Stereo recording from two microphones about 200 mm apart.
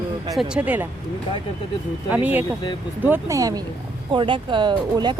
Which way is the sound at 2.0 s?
10° right (ahead or behind).